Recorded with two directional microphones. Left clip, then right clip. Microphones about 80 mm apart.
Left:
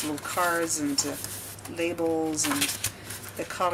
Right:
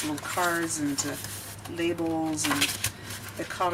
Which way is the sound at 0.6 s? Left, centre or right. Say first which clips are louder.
Left 2 dB; centre.